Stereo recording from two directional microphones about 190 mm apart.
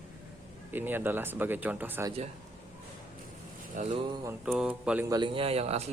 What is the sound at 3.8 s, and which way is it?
Speech, 30° right (ahead or behind).